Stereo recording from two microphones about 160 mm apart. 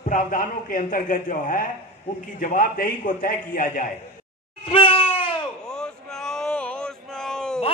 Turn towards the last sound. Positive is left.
turn(degrees=5)  # may be behind; listen again after turning